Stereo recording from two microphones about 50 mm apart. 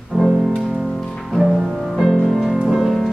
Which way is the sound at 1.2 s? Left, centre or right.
Centre.